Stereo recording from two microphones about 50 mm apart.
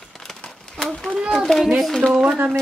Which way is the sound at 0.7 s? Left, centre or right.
Centre.